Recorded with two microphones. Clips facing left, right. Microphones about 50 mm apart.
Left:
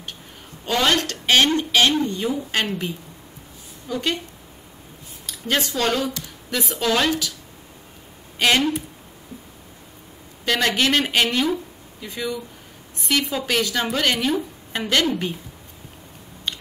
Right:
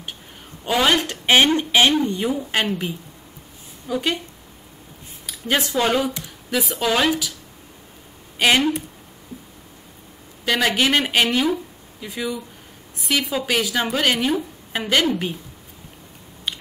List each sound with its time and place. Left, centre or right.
0.7 s a sound: centre
1.2 s a woman's voice: centre
3.8 s a woman's voice: centre
5.2 s speech: centre
6.5 s a woman's voice: centre
8.4 s a woman's voice: centre
10.4 s a woman's voice: centre